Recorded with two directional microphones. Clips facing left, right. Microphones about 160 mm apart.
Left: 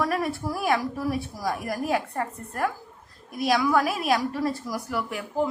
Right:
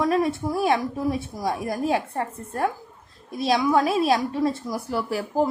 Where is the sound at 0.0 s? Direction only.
20° right (ahead or behind).